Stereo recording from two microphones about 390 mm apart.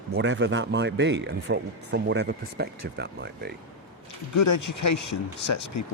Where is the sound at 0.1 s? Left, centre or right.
Right.